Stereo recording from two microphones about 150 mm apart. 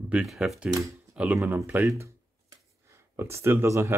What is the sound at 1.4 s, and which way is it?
Speech, 15° right (ahead or behind).